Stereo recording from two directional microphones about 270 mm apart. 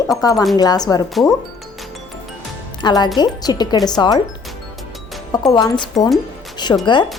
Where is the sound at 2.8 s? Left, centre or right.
Centre.